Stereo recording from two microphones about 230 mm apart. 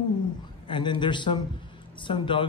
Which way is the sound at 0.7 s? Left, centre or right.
Centre.